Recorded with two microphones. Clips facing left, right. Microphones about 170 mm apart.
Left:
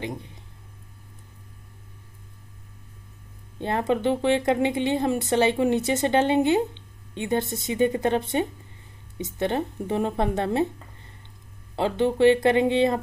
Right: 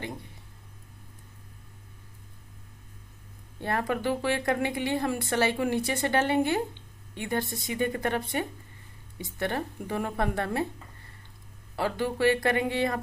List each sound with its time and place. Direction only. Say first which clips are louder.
0.0 s speech: left 5 dB; 20° left (ahead or behind)
3.5 s speech: left 5 dB; 20° left (ahead or behind)
11.7 s speech: left 6 dB; 25° left (ahead or behind)